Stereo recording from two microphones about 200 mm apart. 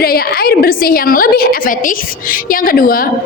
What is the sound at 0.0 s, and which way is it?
A woman's voice, 50° left (ahead or behind).